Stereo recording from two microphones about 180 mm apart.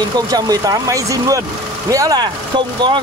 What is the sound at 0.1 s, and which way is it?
Speech, 20° right (ahead or behind).